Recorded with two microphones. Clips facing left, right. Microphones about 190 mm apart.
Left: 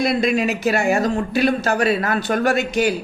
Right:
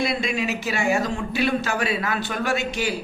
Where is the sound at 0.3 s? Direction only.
55° left (ahead or behind).